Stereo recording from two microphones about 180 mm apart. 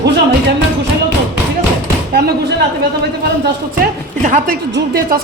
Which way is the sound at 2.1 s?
60° right (ahead or behind).